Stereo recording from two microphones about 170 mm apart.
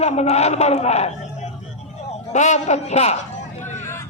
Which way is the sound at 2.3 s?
45° left (ahead or behind).